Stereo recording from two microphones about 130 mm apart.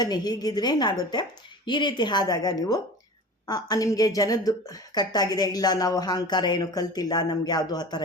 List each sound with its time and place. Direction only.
0.0 s a woman's voice: 30° left (ahead or behind)